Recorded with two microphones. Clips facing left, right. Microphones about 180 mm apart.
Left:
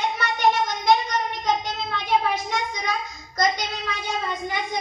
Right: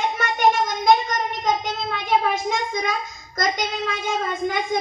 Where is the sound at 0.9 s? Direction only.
50° right (ahead or behind).